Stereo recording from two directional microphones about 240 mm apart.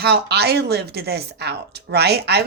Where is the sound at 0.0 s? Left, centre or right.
Right.